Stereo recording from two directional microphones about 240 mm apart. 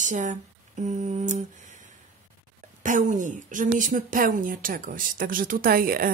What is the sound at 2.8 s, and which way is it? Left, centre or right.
Speech, right.